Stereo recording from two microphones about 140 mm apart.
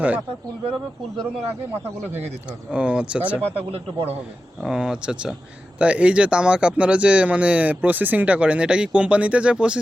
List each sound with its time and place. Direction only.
2.7 s speech: 10° right (ahead or behind)
3.7 s a man's voice: 45° right (ahead or behind)
4.6 s speech: 5° right (ahead or behind)